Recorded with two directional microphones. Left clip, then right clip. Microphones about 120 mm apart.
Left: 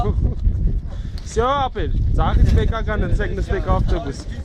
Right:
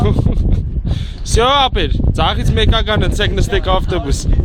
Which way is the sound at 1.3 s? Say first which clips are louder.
Right 7 dB; 5° right (ahead or behind).